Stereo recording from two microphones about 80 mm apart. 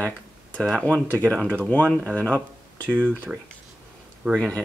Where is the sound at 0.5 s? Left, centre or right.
Centre.